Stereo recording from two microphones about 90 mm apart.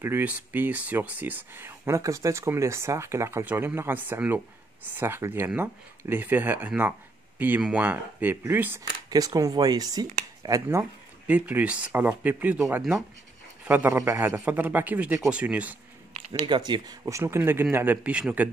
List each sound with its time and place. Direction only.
0.0 s speech: 20° right (ahead or behind)
9.1 s speech: 40° right (ahead or behind)
11.2 s speech: 15° right (ahead or behind)
13.7 s a man's voice: 25° right (ahead or behind)
14.4 s speech: 20° right (ahead or behind)
16.1 s speech: 60° right (ahead or behind)
17.0 s speech: 30° right (ahead or behind)